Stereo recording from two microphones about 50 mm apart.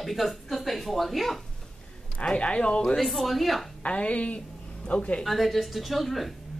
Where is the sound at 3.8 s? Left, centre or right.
Left.